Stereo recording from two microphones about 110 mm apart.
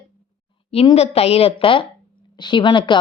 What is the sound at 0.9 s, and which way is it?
Speech, 70° left (ahead or behind).